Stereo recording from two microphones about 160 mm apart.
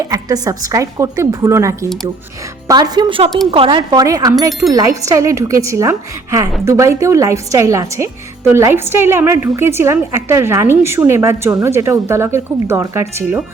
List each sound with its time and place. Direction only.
0.0 s a woman's voice: 20° right (ahead or behind)